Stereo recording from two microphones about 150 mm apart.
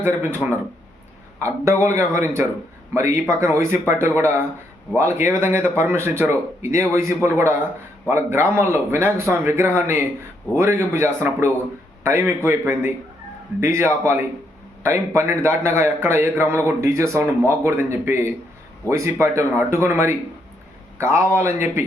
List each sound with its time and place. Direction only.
0.0 s a man's voice: 15° right (ahead or behind)
1.4 s a man's voice: 20° right (ahead or behind)